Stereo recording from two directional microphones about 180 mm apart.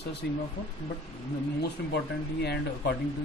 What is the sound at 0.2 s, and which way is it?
Speech, 65° left (ahead or behind).